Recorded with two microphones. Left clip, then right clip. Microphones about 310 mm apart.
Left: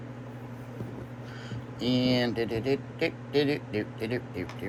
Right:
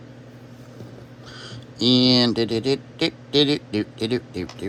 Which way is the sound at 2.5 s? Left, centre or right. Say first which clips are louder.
Right 6 dB; right.